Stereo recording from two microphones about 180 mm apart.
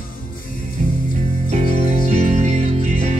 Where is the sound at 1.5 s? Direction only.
35° right (ahead or behind).